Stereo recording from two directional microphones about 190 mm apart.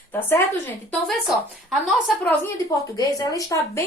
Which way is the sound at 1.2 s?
Centre (ahead or behind).